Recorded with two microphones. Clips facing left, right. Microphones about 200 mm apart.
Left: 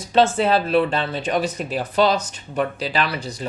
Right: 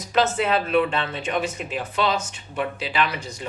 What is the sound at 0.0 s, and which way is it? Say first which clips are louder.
A man's voice: left 4 dB; 30° left (ahead or behind).